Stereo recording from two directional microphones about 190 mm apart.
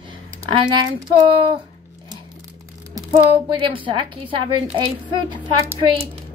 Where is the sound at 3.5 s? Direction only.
25° right (ahead or behind).